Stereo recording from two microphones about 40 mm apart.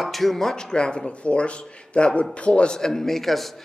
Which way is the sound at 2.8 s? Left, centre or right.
Centre.